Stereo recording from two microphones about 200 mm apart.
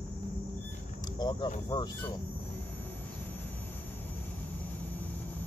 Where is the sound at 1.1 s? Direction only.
20° left (ahead or behind).